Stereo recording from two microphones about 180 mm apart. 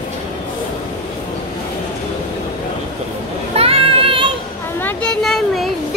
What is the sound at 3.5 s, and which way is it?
Child singing, 35° right (ahead or behind).